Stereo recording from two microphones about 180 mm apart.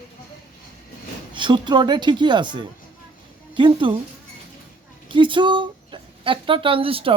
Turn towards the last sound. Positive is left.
turn(degrees=-30)  # may be behind; listen again after turning